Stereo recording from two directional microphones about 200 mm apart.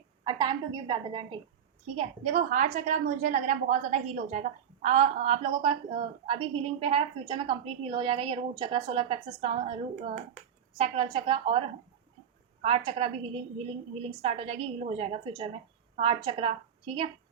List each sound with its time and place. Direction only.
0.3 s a woman's voice: 25° right (ahead or behind)
2.3 s a woman's voice: 40° right (ahead or behind)
10.8 s a woman's voice: 25° right (ahead or behind)
12.6 s a woman's voice: 25° right (ahead or behind)